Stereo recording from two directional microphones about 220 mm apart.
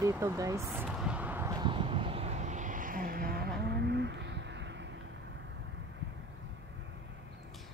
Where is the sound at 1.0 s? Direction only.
5° right (ahead or behind); by 4.3 s 50° right (ahead or behind).